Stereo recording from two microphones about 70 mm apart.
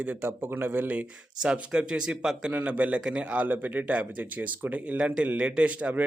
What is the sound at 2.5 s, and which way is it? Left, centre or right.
A man's voice, right.